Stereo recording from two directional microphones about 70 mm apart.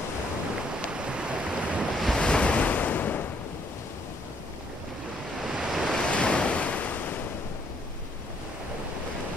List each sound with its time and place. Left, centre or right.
0.9 s waves: centre
2.1 s waves: centre
5.4 s waves: centre
6.0 s waves: centre